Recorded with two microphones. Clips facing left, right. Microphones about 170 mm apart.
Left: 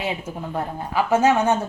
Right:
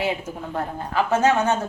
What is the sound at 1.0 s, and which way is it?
Speech, 10° left (ahead or behind).